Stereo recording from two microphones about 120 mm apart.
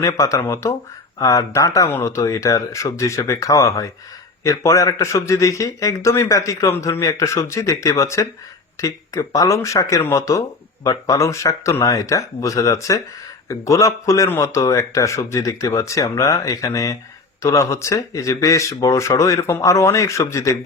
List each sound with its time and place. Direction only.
0.0 s a man's voice: 25° left (ahead or behind)